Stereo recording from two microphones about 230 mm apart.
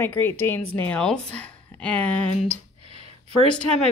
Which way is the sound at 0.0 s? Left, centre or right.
Centre.